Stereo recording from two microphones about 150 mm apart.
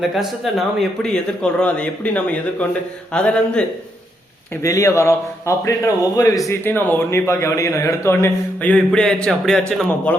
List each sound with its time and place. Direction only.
0.0 s a man's voice: centre (ahead or behind)
4.6 s a man's voice: 20° left (ahead or behind)